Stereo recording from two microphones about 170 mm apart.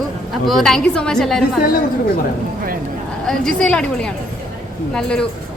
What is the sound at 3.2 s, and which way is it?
A woman's voice, 5° left (ahead or behind).